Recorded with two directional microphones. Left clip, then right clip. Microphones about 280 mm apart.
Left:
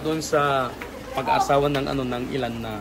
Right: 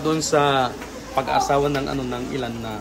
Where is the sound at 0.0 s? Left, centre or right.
Right.